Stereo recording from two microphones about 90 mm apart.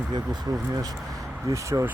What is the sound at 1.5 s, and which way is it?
Speech, 35° right (ahead or behind).